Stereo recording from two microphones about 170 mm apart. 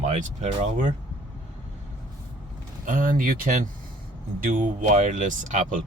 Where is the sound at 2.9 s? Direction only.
55° right (ahead or behind).